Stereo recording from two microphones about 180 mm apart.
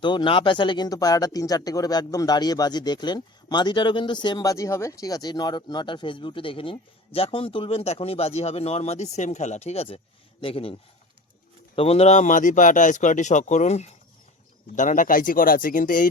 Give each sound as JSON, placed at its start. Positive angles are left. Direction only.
{"t": 0.0, "sound": "speech", "side_deg": 25}